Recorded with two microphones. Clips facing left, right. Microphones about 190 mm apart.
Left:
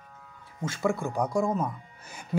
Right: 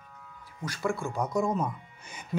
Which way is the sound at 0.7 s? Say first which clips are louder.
Left 3 dB; 25° left (ahead or behind).